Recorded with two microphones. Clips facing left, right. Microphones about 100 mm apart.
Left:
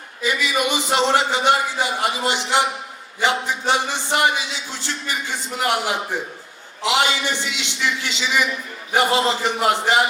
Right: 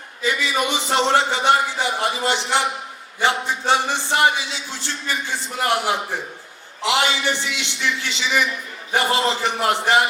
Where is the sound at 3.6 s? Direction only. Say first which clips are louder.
Right 4 dB; 15° left (ahead or behind).